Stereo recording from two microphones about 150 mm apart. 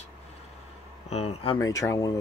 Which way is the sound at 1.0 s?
45° left (ahead or behind).